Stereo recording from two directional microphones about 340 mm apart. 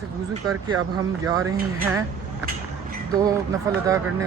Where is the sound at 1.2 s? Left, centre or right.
Centre.